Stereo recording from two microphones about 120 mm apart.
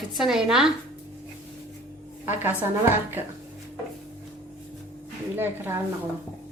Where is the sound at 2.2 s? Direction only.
15° right (ahead or behind).